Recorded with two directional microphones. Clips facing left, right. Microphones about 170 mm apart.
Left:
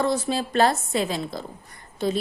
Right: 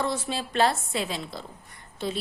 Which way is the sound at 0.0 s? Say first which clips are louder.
Left 5 dB; 40° left (ahead or behind).